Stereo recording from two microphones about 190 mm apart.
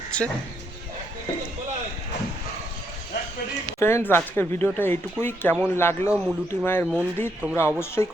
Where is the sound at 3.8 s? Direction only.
15° left (ahead or behind).